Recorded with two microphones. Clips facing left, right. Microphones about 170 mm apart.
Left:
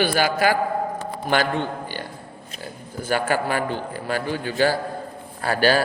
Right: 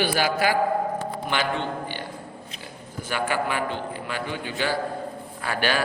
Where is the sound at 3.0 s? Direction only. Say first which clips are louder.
Left 4 dB; 40° left (ahead or behind).